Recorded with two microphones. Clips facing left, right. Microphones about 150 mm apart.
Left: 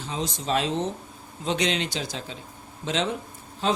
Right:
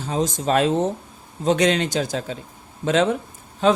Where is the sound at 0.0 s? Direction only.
45° right (ahead or behind).